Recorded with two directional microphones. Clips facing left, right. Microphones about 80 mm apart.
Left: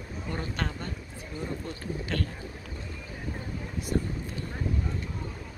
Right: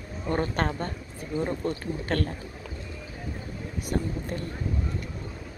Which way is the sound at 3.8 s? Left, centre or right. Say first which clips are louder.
Right 1 dB; right.